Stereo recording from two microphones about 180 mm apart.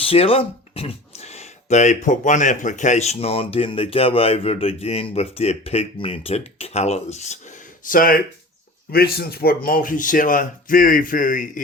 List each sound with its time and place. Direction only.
0.0 s speech: 30° left (ahead or behind)
7.9 s speech: 50° left (ahead or behind)